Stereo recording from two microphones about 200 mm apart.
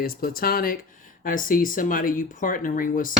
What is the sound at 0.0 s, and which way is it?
Speech, 45° left (ahead or behind).